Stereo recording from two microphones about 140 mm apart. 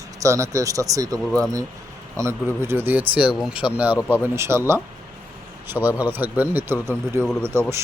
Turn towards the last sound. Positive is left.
turn(degrees=-20)  # may be behind; listen again after turning